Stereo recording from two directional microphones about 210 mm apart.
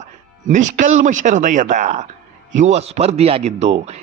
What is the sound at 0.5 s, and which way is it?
A man's voice, 35° right (ahead or behind).